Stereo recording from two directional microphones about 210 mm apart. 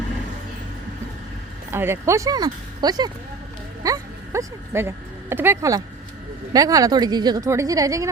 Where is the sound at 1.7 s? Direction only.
10° right (ahead or behind).